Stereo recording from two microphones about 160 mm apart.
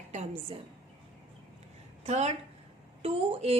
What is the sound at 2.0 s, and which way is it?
A woman's voice, 45° right (ahead or behind).